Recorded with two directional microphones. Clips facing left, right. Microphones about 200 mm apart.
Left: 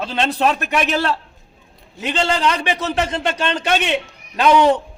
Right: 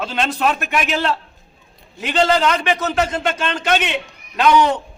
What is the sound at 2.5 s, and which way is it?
Speech, 35° left (ahead or behind).